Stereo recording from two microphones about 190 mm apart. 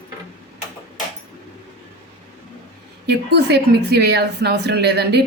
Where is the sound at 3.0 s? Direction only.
60° right (ahead or behind).